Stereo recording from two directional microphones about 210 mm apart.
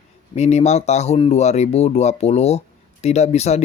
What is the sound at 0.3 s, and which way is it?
Speech, 30° left (ahead or behind).